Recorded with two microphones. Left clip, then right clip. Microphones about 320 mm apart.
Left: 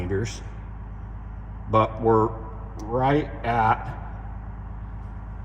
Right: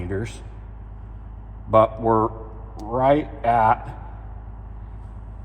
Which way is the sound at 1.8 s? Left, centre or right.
Centre.